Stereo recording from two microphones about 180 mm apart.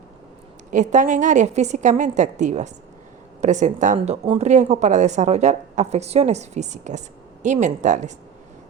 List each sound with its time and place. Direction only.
0.7 s a woman's voice: 45° right (ahead or behind)